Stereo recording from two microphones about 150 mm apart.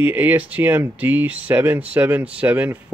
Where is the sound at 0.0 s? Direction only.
10° right (ahead or behind).